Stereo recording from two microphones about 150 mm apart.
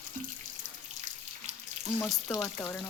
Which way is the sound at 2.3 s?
20° left (ahead or behind).